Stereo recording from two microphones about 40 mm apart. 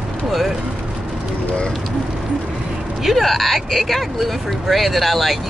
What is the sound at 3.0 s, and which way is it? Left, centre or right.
Speech, centre.